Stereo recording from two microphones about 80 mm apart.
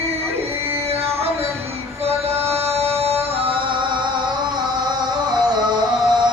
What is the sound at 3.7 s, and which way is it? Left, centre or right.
Music, right.